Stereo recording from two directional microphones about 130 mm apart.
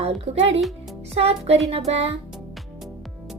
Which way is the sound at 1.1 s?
50° right (ahead or behind).